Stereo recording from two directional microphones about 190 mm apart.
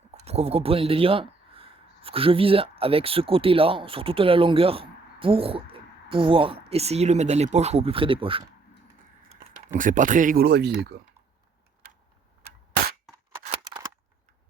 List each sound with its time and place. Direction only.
0.1 s speech: 35° right (ahead or behind)
9.7 s speech: 45° right (ahead or behind)
13.1 s scissors: centre (ahead or behind)